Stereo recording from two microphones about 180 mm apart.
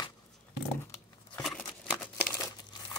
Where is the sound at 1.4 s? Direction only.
5° left (ahead or behind).